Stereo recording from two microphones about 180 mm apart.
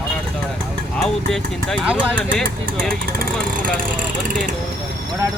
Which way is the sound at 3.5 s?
50° right (ahead or behind).